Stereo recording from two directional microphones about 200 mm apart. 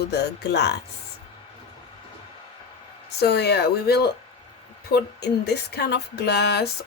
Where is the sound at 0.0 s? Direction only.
55° left (ahead or behind).